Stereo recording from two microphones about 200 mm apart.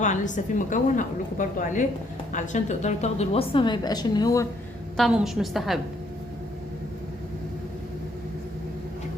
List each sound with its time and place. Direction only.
0.0 s a woman's voice: 40° left (ahead or behind); by 4.4 s 20° left (ahead or behind)
4.9 s a woman's voice: centre (ahead or behind)